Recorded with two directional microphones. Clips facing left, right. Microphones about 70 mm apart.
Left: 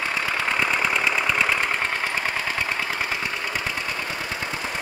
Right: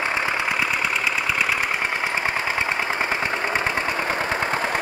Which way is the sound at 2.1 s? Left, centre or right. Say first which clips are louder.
Right 2 dB; right.